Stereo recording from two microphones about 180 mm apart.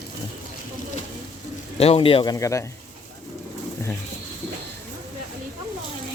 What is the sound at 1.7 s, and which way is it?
Speech, 35° left (ahead or behind).